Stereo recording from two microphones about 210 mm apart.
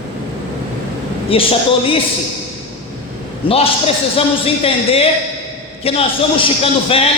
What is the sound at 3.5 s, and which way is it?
A man's voice, 25° left (ahead or behind).